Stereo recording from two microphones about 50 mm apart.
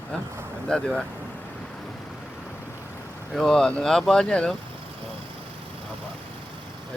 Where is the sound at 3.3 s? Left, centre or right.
Centre.